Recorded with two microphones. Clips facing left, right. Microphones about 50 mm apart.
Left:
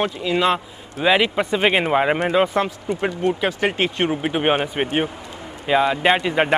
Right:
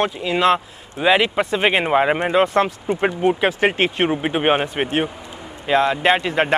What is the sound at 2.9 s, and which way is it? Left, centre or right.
Speech, right.